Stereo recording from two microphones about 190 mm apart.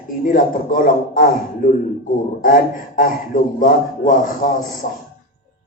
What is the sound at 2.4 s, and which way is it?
Speech, 45° left (ahead or behind).